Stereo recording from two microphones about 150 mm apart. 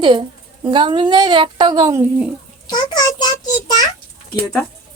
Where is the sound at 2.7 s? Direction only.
30° left (ahead or behind).